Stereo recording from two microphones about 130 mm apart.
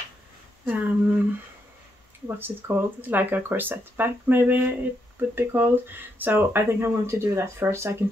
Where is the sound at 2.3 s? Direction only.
15° right (ahead or behind).